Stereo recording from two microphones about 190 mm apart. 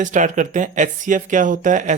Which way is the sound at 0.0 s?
40° right (ahead or behind).